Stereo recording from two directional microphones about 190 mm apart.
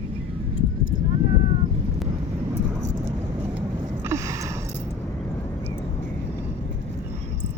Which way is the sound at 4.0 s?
15° right (ahead or behind).